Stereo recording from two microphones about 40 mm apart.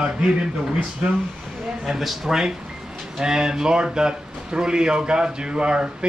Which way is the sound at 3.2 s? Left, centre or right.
Centre.